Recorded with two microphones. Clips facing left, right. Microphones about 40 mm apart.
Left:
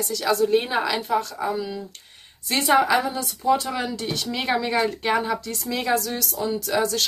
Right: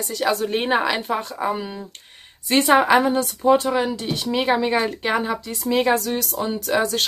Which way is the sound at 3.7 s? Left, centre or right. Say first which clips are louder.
Right 5 dB; centre.